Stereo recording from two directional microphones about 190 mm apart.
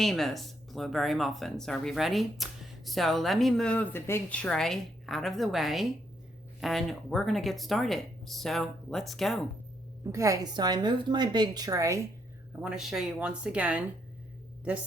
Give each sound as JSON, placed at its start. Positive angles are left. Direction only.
{"t": 0.0, "sound": "speech", "side_deg": 0}
{"t": 10.0, "sound": "a woman's voice", "side_deg": -15}
{"t": 12.6, "sound": "speech", "side_deg": 0}